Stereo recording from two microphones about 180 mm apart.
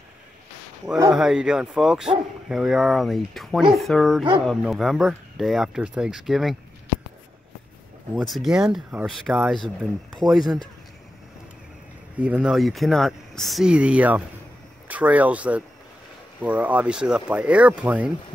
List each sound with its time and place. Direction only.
1.1 s speech: 5° right (ahead or behind)
8.2 s speech: centre (ahead or behind)
10.2 s speech: 20° right (ahead or behind)
12.2 s speech: 5° right (ahead or behind)